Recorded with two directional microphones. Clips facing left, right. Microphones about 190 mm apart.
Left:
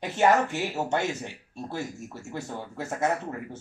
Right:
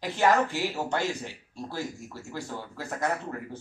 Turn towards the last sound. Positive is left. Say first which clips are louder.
# left 2 dB
turn(degrees=25)  # may be behind; listen again after turning